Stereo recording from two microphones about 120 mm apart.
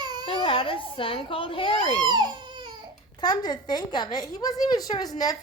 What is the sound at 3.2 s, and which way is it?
A woman's voice, 35° left (ahead or behind).